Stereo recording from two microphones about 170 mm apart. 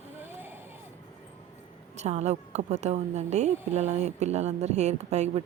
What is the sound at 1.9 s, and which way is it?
A woman's voice, 40° right (ahead or behind).